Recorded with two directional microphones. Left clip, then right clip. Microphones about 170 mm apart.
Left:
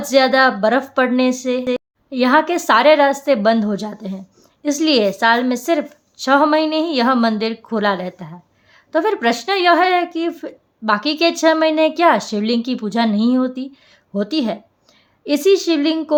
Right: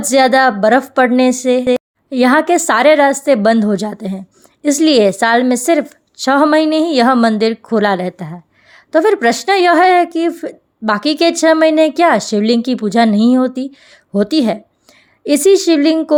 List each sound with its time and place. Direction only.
0.0 s a woman's voice: 40° right (ahead or behind)